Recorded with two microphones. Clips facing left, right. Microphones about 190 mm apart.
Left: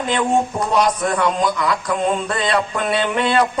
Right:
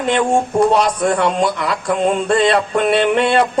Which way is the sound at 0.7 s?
25° right (ahead or behind).